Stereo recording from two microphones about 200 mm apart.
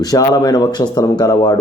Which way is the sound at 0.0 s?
20° left (ahead or behind).